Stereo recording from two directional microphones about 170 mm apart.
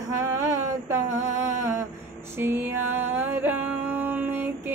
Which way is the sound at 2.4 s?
10° right (ahead or behind).